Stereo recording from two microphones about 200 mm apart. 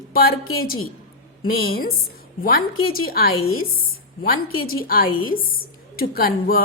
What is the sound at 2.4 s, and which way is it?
A woman's voice, 50° left (ahead or behind).